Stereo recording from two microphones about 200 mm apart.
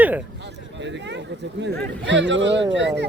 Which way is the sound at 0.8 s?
60° right (ahead or behind).